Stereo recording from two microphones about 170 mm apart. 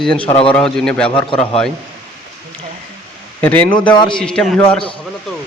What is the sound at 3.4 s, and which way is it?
Speech, 10° left (ahead or behind).